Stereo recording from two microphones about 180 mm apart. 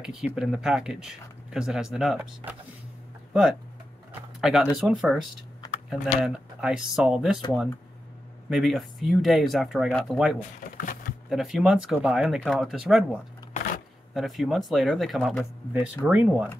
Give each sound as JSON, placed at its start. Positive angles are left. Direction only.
{"t": 0.0, "sound": "speech", "side_deg": -5}
{"t": 4.4, "sound": "speech", "side_deg": -5}
{"t": 8.5, "sound": "speech", "side_deg": 0}
{"t": 10.8, "sound": "a sound", "side_deg": 50}
{"t": 11.2, "sound": "speech", "side_deg": 0}
{"t": 13.5, "sound": "a sound", "side_deg": 45}
{"t": 14.1, "sound": "speech", "side_deg": 0}